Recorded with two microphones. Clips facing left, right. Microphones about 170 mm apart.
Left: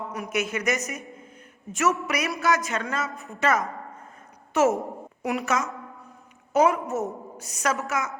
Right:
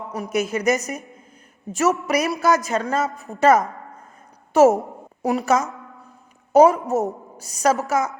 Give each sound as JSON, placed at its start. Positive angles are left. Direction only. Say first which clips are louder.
{"t": 0.1, "sound": "a man's voice", "louder": "right 7 dB", "side_deg": -35}